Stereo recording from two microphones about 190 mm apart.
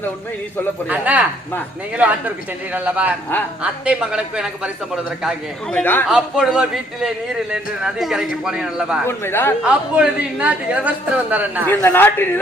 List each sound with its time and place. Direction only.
0.9 s a man's voice: 5° right (ahead or behind)
2.7 s a man's voice: 5° right (ahead or behind)
5.7 s speech: 10° left (ahead or behind)
6.1 s a woman's voice: 5° right (ahead or behind)
9.0 s speech: 10° left (ahead or behind)
9.6 s a man's voice: 5° right (ahead or behind)
11.6 s speech: 10° left (ahead or behind)